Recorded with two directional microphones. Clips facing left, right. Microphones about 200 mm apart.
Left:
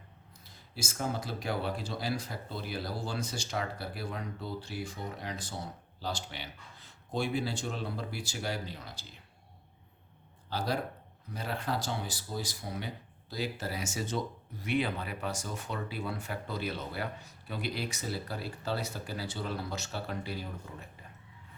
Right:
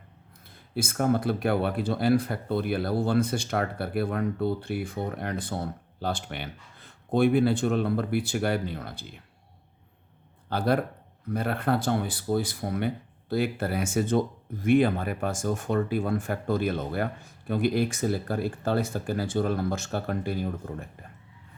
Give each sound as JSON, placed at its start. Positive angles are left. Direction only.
{"t": 0.4, "sound": "speech", "side_deg": -55}
{"t": 10.5, "sound": "speech", "side_deg": -55}